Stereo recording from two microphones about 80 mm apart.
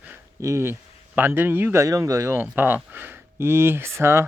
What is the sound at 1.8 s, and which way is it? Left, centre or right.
Speech, right.